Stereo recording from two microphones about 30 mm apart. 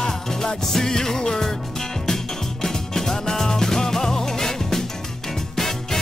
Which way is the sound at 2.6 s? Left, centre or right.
Centre.